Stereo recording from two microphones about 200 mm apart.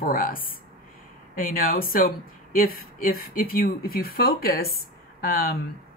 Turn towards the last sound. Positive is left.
turn(degrees=45)  # may be behind; listen again after turning